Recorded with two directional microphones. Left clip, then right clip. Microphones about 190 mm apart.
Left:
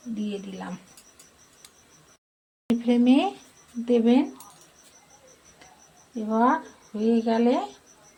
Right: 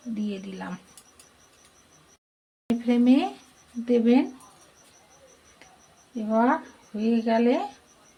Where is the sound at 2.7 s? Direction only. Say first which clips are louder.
Left 1 dB; 10° left (ahead or behind).